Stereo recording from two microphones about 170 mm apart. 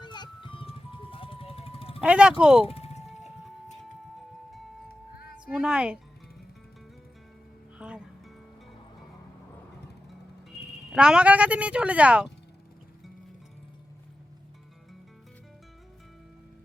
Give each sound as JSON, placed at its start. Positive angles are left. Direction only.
{"t": 0.0, "sound": "music", "side_deg": 25}
{"t": 2.0, "sound": "speech", "side_deg": -5}
{"t": 2.6, "sound": "music", "side_deg": 35}
{"t": 5.5, "sound": "speech", "side_deg": -5}
{"t": 7.8, "sound": "music", "side_deg": -5}
{"t": 10.9, "sound": "speech", "side_deg": -5}